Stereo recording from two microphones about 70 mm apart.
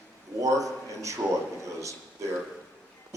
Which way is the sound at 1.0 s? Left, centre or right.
Right.